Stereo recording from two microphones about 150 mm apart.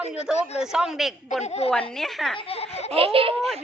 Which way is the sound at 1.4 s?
45° left (ahead or behind).